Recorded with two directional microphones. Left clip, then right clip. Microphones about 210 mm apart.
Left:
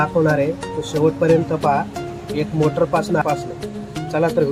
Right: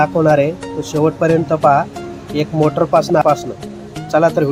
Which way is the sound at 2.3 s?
30° right (ahead or behind).